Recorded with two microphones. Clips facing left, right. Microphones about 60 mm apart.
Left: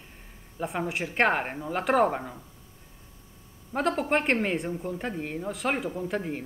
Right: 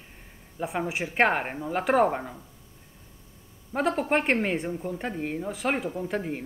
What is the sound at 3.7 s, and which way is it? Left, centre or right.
A woman's voice, centre.